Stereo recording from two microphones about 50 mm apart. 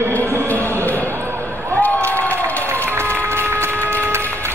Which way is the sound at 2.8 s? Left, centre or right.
Right.